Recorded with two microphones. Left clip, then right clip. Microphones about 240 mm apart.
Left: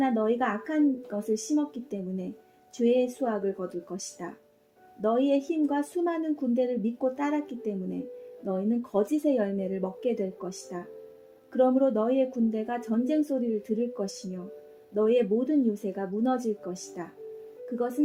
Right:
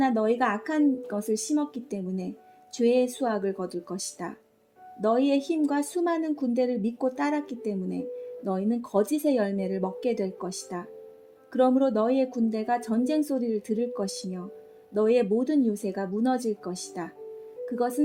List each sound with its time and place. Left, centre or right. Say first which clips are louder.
0.0 s speech: right 2 dB; right